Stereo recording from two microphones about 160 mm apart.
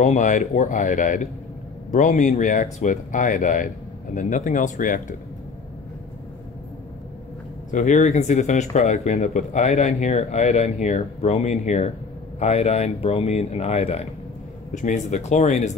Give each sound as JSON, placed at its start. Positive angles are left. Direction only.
{"t": 0.0, "sound": "speech", "side_deg": 50}
{"t": 7.7, "sound": "speech", "side_deg": 50}